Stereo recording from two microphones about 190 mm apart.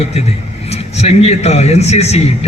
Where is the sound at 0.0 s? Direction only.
35° left (ahead or behind).